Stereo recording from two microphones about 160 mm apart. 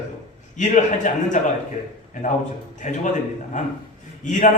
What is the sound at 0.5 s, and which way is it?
Speech, 50° left (ahead or behind).